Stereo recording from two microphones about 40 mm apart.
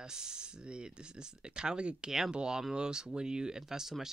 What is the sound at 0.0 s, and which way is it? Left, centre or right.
Speech, centre.